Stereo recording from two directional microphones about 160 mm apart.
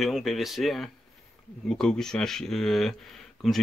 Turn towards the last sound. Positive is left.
turn(degrees=0)  # may be behind; listen again after turning